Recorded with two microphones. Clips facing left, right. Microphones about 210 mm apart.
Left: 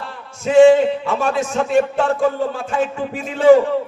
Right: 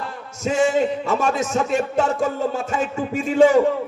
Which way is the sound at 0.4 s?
45° right (ahead or behind).